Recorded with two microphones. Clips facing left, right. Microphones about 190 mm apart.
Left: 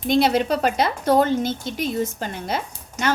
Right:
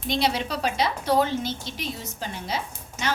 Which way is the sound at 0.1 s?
50° left (ahead or behind).